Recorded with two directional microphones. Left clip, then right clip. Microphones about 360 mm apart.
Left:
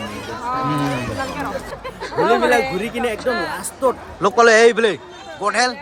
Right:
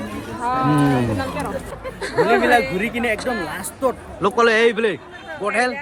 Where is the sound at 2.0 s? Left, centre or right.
Right.